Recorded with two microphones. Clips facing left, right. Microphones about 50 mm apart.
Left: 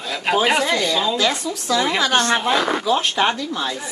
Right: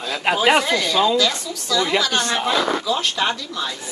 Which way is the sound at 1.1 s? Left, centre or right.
Left.